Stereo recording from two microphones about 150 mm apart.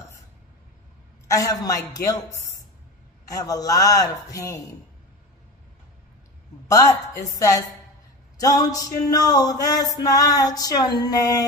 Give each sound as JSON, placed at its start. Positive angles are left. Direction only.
{"t": 1.3, "sound": "music", "side_deg": 25}
{"t": 6.7, "sound": "music", "side_deg": 20}